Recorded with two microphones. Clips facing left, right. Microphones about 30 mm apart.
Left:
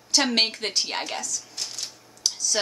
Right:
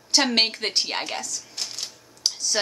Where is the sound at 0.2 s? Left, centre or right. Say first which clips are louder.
Right 1 dB; centre.